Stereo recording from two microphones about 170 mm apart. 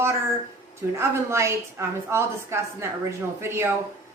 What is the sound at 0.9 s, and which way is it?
A woman's voice, 15° right (ahead or behind).